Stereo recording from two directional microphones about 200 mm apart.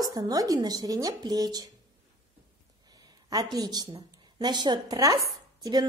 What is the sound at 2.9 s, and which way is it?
A woman's voice, 20° right (ahead or behind).